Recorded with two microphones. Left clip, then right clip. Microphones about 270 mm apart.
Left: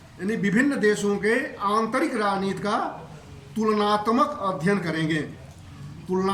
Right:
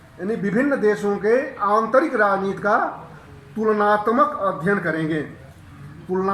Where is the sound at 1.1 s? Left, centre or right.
Left.